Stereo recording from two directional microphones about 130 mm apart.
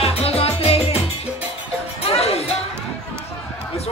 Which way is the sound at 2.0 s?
50° left (ahead or behind).